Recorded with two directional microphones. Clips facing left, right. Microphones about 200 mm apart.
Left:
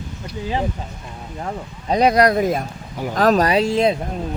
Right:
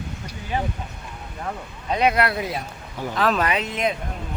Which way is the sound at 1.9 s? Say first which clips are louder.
Left 6 dB; 35° left (ahead or behind).